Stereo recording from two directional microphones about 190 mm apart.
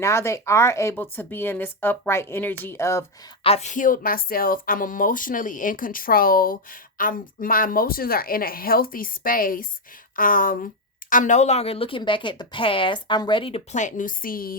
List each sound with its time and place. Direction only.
0.0 s a woman's voice: 15° left (ahead or behind)
3.4 s speech: 35° left (ahead or behind)
13.7 s speech: 40° left (ahead or behind)